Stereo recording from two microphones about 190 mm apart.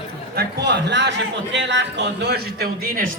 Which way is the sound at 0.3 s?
60° right (ahead or behind).